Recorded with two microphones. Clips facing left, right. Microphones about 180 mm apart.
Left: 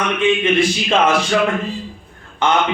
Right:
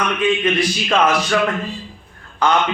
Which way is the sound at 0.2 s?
25° left (ahead or behind).